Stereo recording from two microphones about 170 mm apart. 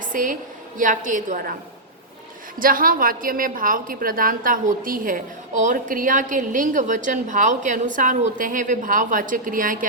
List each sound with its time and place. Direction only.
0.1 s a woman's voice: 50° right (ahead or behind)
2.6 s a woman's voice: 55° right (ahead or behind)